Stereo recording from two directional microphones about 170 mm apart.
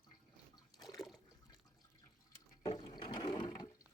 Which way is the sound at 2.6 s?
30° left (ahead or behind).